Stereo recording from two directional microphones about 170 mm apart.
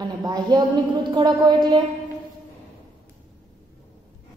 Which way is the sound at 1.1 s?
25° right (ahead or behind).